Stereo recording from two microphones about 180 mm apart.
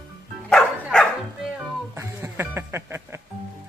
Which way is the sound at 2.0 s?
15° right (ahead or behind).